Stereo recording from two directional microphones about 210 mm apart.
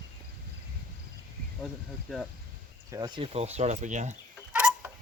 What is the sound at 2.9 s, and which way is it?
Speech, 20° right (ahead or behind).